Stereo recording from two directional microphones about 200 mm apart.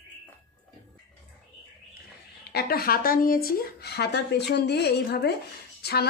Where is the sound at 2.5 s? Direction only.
50° left (ahead or behind).